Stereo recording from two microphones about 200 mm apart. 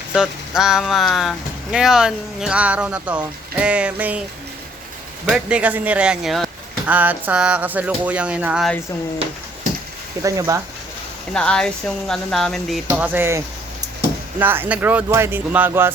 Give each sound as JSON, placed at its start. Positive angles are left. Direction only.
{"t": 0.1, "sound": "speech", "side_deg": -5}
{"t": 5.3, "sound": "speech", "side_deg": -5}
{"t": 10.2, "sound": "speech", "side_deg": -15}
{"t": 11.3, "sound": "speech", "side_deg": 5}
{"t": 12.9, "sound": "speech", "side_deg": -10}